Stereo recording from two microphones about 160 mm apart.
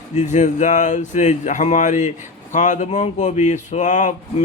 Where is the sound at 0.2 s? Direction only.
50° left (ahead or behind).